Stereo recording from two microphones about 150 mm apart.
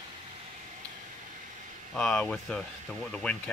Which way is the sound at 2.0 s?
10° left (ahead or behind).